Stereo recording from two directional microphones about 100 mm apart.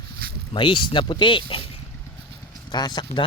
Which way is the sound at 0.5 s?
55° left (ahead or behind).